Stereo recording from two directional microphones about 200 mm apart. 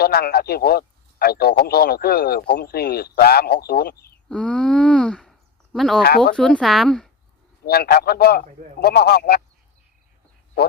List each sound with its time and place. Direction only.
0.0 s a man's voice: 50° left (ahead or behind)
4.3 s a sound: 5° left (ahead or behind)
6.3 s a woman's voice: 5° left (ahead or behind)
7.6 s a man's voice: 50° left (ahead or behind)